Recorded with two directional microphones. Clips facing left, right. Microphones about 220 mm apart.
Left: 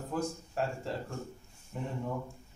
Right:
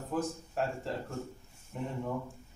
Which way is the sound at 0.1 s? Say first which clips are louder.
Right 1 dB; centre (ahead or behind).